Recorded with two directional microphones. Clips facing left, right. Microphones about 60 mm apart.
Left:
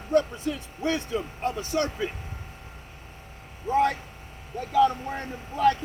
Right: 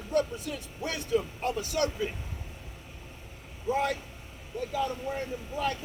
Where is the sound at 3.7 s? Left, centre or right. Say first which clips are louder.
Left 5 dB; left.